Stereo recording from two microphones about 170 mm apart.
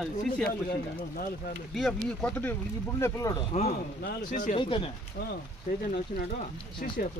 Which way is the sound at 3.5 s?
40° left (ahead or behind).